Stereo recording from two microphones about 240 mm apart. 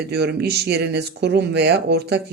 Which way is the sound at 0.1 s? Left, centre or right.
Right.